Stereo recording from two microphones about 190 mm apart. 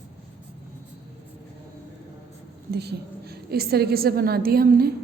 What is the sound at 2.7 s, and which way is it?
A woman's voice, 60° right (ahead or behind).